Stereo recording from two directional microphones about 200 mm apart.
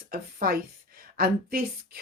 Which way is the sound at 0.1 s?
50° right (ahead or behind).